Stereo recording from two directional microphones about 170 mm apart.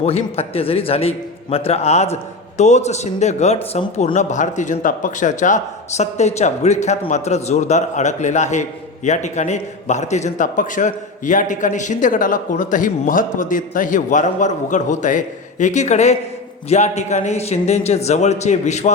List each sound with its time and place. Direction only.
0.0 s a man's voice: 35° left (ahead or behind)